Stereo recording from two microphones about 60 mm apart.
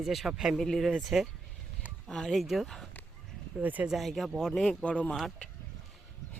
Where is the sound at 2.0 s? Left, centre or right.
Centre.